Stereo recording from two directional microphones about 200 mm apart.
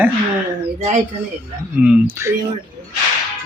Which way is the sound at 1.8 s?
10° right (ahead or behind).